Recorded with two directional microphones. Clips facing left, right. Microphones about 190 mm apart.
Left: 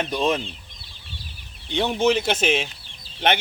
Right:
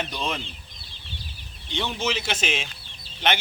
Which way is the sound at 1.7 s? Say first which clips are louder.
Left 8 dB; 55° left (ahead or behind).